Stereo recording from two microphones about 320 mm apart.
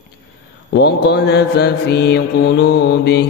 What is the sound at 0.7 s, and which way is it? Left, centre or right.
Mantra, left.